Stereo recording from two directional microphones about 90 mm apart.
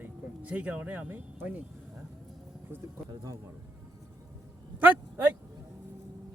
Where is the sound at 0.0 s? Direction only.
15° right (ahead or behind).